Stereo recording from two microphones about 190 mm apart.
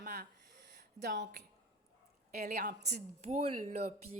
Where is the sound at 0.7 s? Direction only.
60° right (ahead or behind).